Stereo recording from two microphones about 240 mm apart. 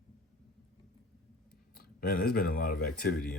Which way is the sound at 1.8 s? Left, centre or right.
Left.